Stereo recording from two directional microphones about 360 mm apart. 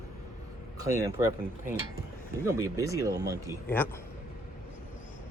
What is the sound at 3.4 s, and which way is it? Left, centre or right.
Speech, centre.